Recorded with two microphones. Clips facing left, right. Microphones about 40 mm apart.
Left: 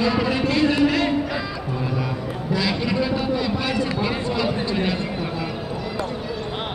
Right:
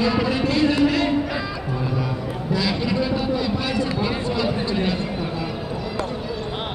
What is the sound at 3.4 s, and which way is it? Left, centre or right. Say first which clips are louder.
Run: even; left.